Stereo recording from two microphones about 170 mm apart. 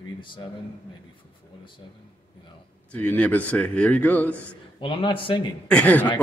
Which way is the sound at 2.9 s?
10° left (ahead or behind).